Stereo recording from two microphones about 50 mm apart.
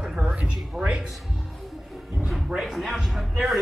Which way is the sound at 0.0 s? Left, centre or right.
Centre.